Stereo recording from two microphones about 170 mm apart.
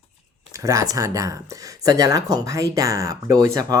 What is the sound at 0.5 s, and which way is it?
Speech, 20° right (ahead or behind).